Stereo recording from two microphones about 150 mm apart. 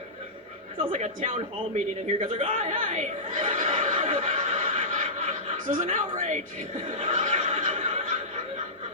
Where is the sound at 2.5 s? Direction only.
55° right (ahead or behind).